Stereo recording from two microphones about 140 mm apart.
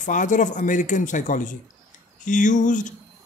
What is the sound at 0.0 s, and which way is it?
A man's voice, 65° left (ahead or behind).